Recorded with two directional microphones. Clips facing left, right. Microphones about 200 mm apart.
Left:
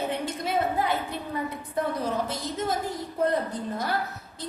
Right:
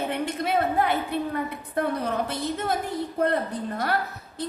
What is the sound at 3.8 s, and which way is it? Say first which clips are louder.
Speech: right 2 dB; 60° right (ahead or behind).